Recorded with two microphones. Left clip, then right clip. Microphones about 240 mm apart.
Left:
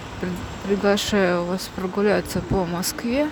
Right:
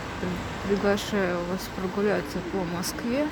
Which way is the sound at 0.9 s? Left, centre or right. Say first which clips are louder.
Left 8 dB; centre.